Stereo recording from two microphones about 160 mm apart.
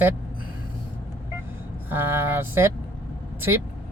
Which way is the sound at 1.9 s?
15° right (ahead or behind).